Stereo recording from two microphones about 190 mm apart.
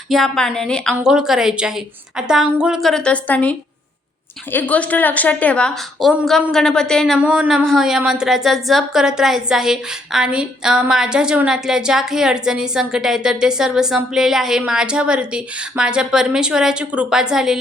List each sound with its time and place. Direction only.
0.1 s a woman's voice: centre (ahead or behind)
4.5 s a woman's voice: 5° left (ahead or behind)